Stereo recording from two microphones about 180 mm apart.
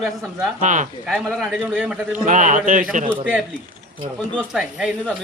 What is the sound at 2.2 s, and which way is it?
Speech, 45° right (ahead or behind).